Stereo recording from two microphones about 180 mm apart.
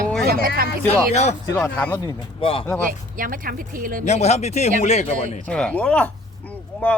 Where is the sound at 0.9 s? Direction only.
35° left (ahead or behind).